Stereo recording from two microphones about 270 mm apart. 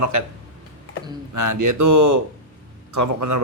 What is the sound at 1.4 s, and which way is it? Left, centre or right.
A man's voice, right.